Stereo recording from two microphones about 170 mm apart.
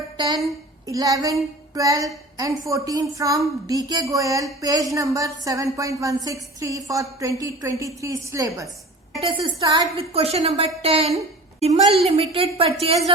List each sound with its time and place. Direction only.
0.4 s a woman's voice: 20° right (ahead or behind); by 13.1 s 35° right (ahead or behind)